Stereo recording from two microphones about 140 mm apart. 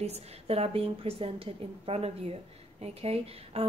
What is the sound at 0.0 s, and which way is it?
A woman's voice, 50° right (ahead or behind).